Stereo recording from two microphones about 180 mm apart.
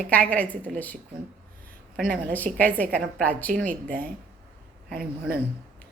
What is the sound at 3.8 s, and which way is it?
Speech, 50° right (ahead or behind).